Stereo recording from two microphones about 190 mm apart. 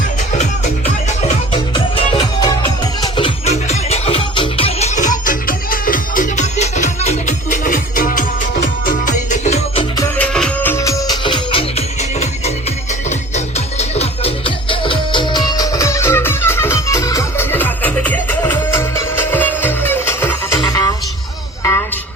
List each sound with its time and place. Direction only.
1.7 s music: 20° left (ahead or behind); by 9.8 s 35° left (ahead or behind)
10.2 s music: 5° left (ahead or behind); by 11.6 s 25° left (ahead or behind)
13.1 s music: 35° left (ahead or behind); by 20.9 s 20° left (ahead or behind)